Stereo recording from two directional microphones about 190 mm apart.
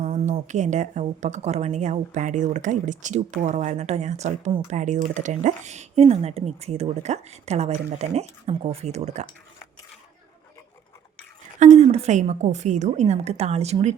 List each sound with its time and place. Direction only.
0.0 s speech: 35° right (ahead or behind)
11.6 s speech: 35° right (ahead or behind)